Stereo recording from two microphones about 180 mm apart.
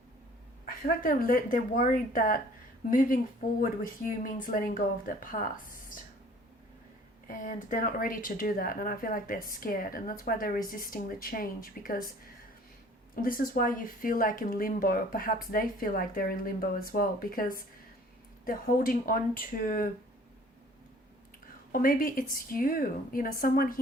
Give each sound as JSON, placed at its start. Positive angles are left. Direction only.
{"t": 0.6, "sound": "speech", "side_deg": 50}
{"t": 4.2, "sound": "speech", "side_deg": 50}
{"t": 7.3, "sound": "speech", "side_deg": 45}
{"t": 13.2, "sound": "speech", "side_deg": 50}
{"t": 21.7, "sound": "speech", "side_deg": 50}